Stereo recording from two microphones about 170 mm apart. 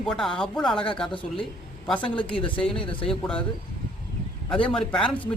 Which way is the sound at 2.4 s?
30° left (ahead or behind).